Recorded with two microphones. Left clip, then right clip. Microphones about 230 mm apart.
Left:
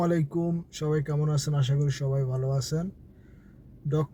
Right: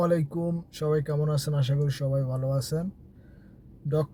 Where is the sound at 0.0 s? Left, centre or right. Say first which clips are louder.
Right 2 dB; centre.